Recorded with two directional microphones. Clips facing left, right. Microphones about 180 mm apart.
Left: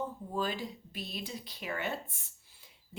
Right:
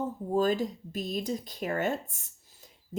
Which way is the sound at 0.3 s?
45° right (ahead or behind).